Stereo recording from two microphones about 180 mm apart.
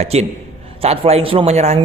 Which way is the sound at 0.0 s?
35° right (ahead or behind).